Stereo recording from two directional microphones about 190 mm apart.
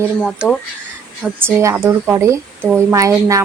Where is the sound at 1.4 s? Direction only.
10° right (ahead or behind).